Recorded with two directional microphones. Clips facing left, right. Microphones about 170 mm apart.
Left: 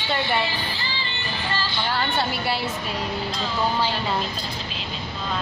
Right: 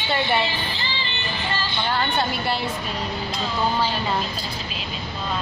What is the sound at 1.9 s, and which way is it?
Speech, 5° left (ahead or behind).